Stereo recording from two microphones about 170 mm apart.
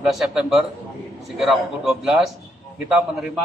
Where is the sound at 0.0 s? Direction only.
Centre (ahead or behind).